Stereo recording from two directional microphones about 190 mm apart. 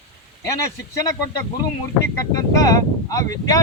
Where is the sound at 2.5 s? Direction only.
20° left (ahead or behind).